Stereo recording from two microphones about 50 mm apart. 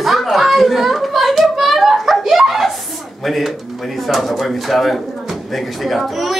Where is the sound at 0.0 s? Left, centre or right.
Centre.